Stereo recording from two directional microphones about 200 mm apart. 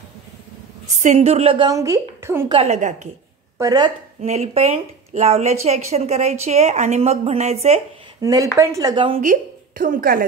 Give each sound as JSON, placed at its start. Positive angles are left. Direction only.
{"t": 0.9, "sound": "a woman's voice", "side_deg": -35}
{"t": 2.5, "sound": "a woman's voice", "side_deg": -35}
{"t": 3.5, "sound": "speech", "side_deg": -20}
{"t": 4.2, "sound": "a woman's voice", "side_deg": -30}
{"t": 8.2, "sound": "speech", "side_deg": -15}
{"t": 9.2, "sound": "a woman's voice", "side_deg": -40}